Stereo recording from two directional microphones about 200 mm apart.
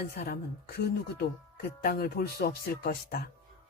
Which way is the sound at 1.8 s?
45° left (ahead or behind).